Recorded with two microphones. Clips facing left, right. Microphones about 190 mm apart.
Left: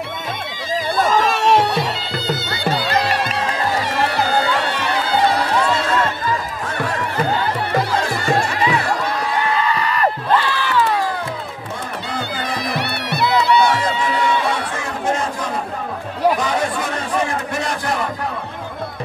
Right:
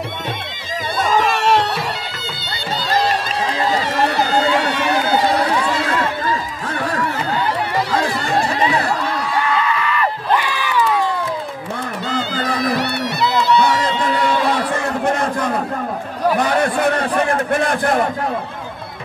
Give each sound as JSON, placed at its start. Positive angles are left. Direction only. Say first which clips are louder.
{"t": 1.3, "sound": "music", "louder": "left 1 dB", "side_deg": 5}
{"t": 2.6, "sound": "music", "louder": "right 1 dB", "side_deg": 60}
{"t": 9.8, "sound": "a sound", "louder": "even", "side_deg": 40}
{"t": 10.3, "sound": "crowd", "louder": "left 1 dB", "side_deg": -15}
{"t": 12.7, "sound": "music", "louder": "right 3 dB", "side_deg": 60}
{"t": 17.3, "sound": "a sound", "louder": "right 6 dB", "side_deg": -55}